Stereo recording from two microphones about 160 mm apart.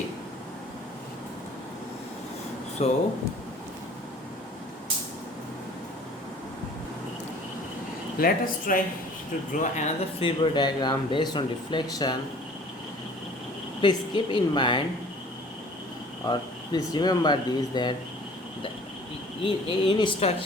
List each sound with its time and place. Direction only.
2.8 s a woman's voice: 40° left (ahead or behind)
8.2 s speech: 60° left (ahead or behind); by 12.1 s 25° left (ahead or behind)
13.8 s a woman's voice: 30° left (ahead or behind)
16.2 s speech: 25° left (ahead or behind)
19.5 s a woman's voice: 30° left (ahead or behind)